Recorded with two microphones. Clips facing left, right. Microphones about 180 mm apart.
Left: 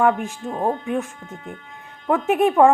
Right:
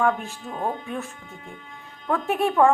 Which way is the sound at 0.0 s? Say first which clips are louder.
Left 4 dB; 15° left (ahead or behind).